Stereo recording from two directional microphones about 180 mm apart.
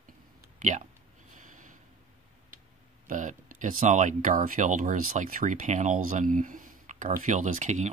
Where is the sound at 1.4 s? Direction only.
45° right (ahead or behind).